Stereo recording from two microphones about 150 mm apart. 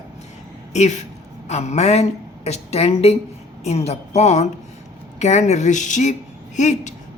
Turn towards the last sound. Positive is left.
turn(degrees=55)  # may be behind; listen again after turning